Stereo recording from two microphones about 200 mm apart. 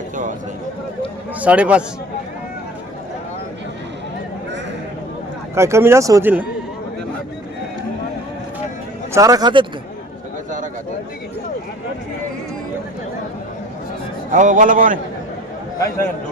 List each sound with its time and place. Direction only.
1.4 s speech: 5° right (ahead or behind)
5.5 s speech: 15° right (ahead or behind)
9.1 s speech: 15° right (ahead or behind)
14.3 s a man's voice: 40° right (ahead or behind)